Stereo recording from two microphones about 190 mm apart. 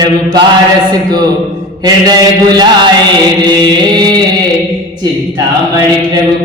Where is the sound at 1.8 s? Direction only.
20° right (ahead or behind).